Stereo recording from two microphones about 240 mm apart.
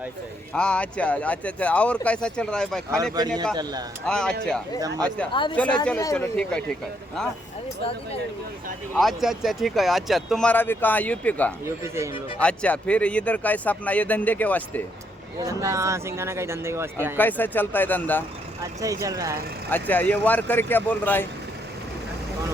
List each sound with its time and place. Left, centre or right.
0.5 s speech: centre
3.0 s speech: centre
4.0 s speech: centre
5.3 s speech: centre
5.5 s speech: centre
9.0 s speech: centre
11.6 s speech: centre
12.4 s speech: centre
15.4 s speech: centre
17.2 s speech: centre
18.6 s speech: centre
19.7 s speech: centre